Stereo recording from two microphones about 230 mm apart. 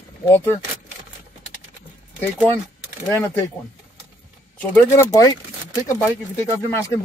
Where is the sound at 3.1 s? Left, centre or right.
Centre.